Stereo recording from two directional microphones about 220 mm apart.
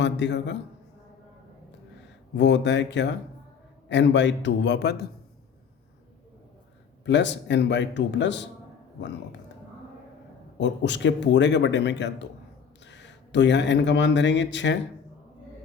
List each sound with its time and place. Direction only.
0.0 s a man's voice: 55° left (ahead or behind)
2.3 s a man's voice: 55° left (ahead or behind)
7.0 s a man's voice: 55° left (ahead or behind)
10.6 s a man's voice: 55° left (ahead or behind)